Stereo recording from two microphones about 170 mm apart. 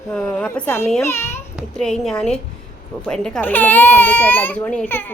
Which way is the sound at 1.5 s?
5° left (ahead or behind).